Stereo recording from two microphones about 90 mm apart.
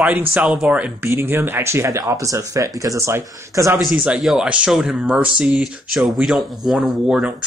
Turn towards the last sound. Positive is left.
turn(degrees=-5)  # may be behind; listen again after turning